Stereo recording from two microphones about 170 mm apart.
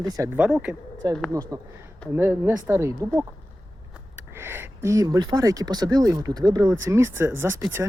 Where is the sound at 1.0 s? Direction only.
20° right (ahead or behind).